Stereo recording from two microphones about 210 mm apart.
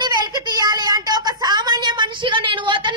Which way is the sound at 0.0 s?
20° right (ahead or behind).